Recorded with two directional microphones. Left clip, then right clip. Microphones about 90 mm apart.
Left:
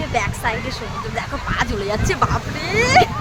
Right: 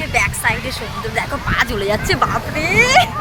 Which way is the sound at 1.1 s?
20° right (ahead or behind).